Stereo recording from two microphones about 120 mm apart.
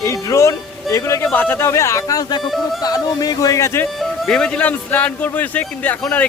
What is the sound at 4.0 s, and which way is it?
Speech, 5° left (ahead or behind).